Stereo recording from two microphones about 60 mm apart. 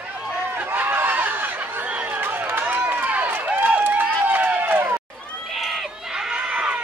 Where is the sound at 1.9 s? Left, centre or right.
Right.